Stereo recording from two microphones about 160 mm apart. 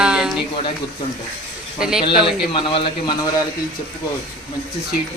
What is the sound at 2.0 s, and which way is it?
Speech, 30° left (ahead or behind).